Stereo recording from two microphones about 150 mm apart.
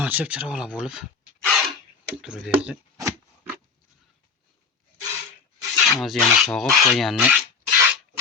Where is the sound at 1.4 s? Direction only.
Centre (ahead or behind).